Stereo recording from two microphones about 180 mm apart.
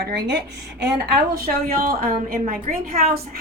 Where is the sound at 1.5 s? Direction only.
55° right (ahead or behind).